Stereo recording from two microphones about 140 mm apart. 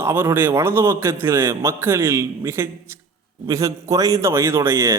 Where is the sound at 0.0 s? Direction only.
15° right (ahead or behind).